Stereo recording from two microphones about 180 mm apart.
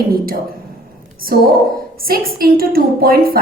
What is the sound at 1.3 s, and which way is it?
A woman's voice, 60° right (ahead or behind).